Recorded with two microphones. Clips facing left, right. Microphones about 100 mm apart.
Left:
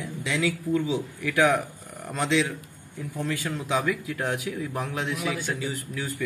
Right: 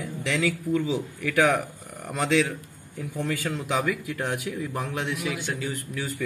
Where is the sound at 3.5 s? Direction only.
Centre (ahead or behind).